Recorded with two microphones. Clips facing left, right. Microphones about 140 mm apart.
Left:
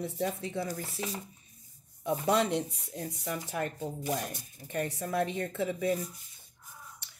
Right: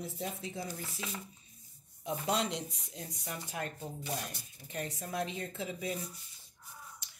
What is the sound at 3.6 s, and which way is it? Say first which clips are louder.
Speech: left 6 dB; 55° left (ahead or behind).